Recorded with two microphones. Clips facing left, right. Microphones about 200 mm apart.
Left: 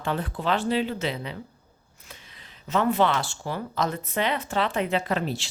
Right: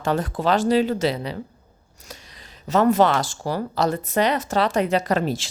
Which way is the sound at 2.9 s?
45° right (ahead or behind).